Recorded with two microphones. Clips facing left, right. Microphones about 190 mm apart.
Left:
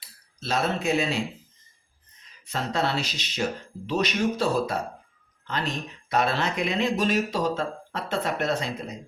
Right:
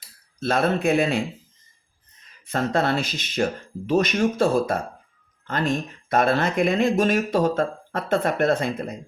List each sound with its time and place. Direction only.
0.3 s a man's voice: 55° right (ahead or behind)
2.5 s speech: 50° right (ahead or behind)